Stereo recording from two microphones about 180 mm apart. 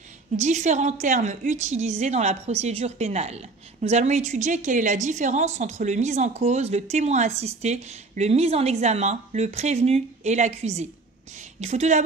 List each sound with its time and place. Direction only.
0.4 s a woman's voice: 40° right (ahead or behind)